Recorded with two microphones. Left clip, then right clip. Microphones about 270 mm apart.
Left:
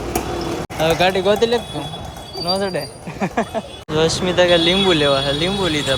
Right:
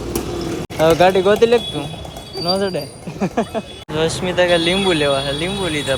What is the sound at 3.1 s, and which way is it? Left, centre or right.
Speech, centre.